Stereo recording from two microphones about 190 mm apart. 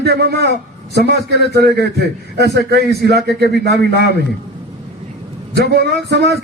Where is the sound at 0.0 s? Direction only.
55° right (ahead or behind).